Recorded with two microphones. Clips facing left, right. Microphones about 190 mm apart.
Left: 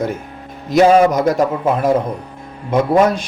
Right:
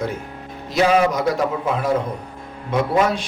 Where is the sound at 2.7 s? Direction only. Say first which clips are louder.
Left 5 dB; 45° left (ahead or behind).